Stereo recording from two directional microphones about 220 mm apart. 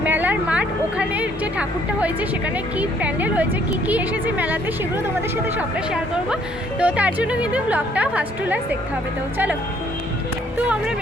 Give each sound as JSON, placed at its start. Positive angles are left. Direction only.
{"t": 0.0, "sound": "a woman's voice", "side_deg": -10}
{"t": 6.7, "sound": "a woman's voice", "side_deg": -5}